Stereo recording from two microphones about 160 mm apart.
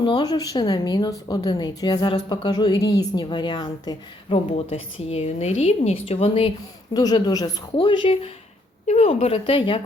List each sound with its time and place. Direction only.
0.0 s a woman's voice: 25° left (ahead or behind)
6.9 s a woman's voice: 25° left (ahead or behind)